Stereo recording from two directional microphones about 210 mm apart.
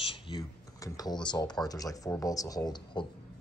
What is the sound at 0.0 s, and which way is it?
Computer keyboard, 25° left (ahead or behind).